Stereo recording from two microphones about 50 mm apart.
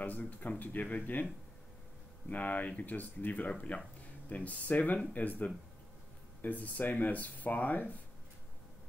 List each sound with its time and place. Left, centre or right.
0.0 s speech: left
2.2 s speech: left